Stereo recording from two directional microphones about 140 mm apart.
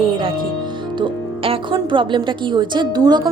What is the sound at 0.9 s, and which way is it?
A woman's voice, 35° right (ahead or behind).